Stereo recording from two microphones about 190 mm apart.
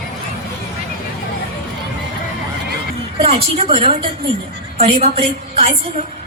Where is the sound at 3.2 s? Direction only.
30° right (ahead or behind).